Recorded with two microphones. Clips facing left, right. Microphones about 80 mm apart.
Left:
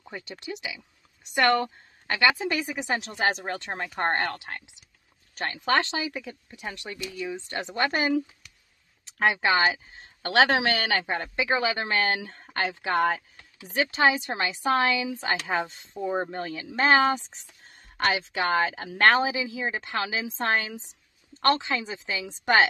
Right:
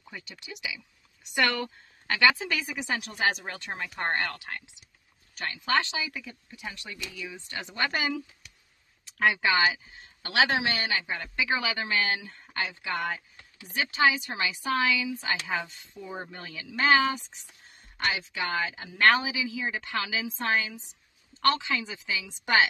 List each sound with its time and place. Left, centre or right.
0.1 s a woman's voice: left
9.2 s a woman's voice: left
21.4 s a woman's voice: left